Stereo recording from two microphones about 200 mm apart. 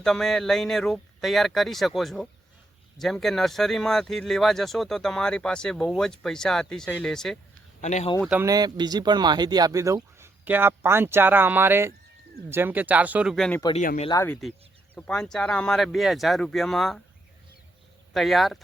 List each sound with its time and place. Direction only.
0.0 s speech: centre (ahead or behind)
7.8 s speech: 35° left (ahead or behind)
8.2 s speech: 5° right (ahead or behind)
8.4 s speech: 20° right (ahead or behind); by 13.6 s centre (ahead or behind)
13.7 s speech: 35° left (ahead or behind)
14.1 s speech: 15° left (ahead or behind)
18.1 s speech: centre (ahead or behind)